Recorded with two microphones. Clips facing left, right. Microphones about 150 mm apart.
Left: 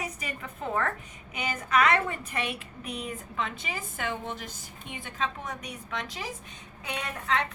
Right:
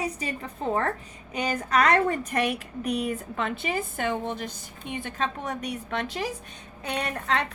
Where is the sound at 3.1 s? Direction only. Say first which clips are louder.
Right 5 dB; 55° right (ahead or behind).